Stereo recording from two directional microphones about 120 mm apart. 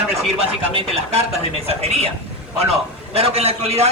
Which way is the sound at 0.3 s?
55° right (ahead or behind).